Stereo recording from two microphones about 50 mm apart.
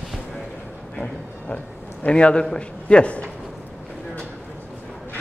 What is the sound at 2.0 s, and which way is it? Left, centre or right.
A man's voice, left.